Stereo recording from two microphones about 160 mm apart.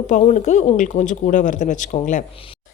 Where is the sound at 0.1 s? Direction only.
45° left (ahead or behind).